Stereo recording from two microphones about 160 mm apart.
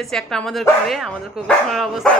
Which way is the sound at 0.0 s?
5° left (ahead or behind).